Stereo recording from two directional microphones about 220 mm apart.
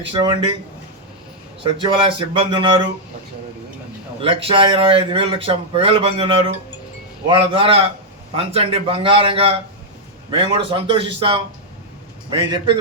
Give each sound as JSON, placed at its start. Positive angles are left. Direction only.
{"t": 0.1, "sound": "a man's voice", "side_deg": -20}
{"t": 1.6, "sound": "a man's voice", "side_deg": -25}
{"t": 4.2, "sound": "a man's voice", "side_deg": -25}